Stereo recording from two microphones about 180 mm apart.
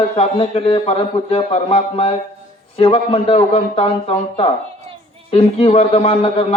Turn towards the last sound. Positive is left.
turn(degrees=35)  # may be behind; listen again after turning